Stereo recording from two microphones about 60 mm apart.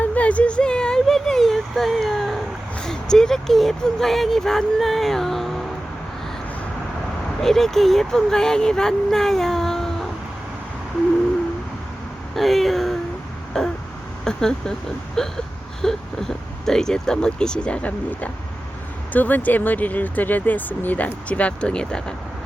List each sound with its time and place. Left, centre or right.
0.0 s a sound: left; by 2.4 s centre
2.7 s speech: centre
7.4 s speech: centre
12.3 s speech: centre
13.5 s throat clearing: centre
14.3 s speech: centre